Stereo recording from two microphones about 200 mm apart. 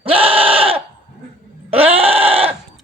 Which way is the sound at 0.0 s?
30° right (ahead or behind).